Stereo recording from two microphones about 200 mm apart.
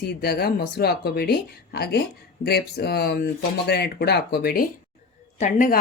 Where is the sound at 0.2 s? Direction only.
50° left (ahead or behind).